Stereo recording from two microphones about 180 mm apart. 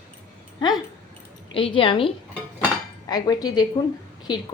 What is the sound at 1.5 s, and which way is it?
A woman's voice, 30° left (ahead or behind).